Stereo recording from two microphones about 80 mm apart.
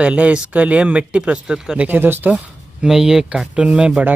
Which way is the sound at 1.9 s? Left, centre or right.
Right.